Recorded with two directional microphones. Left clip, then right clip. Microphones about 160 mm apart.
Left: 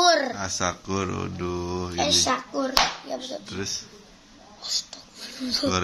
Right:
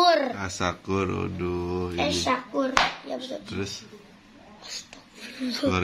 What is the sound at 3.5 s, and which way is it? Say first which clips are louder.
Speech: left 3 dB; centre (ahead or behind).